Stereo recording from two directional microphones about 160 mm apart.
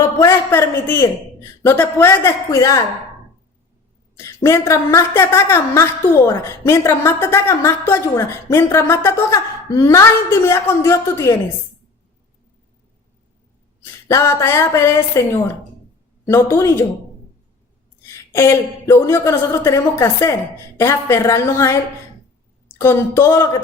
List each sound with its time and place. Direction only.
0.2 s a woman's voice: 15° left (ahead or behind)
4.2 s a woman's voice: 20° left (ahead or behind)
13.8 s a woman's voice: 15° left (ahead or behind)
18.3 s a woman's voice: 15° left (ahead or behind)
22.8 s a woman's voice: 15° left (ahead or behind)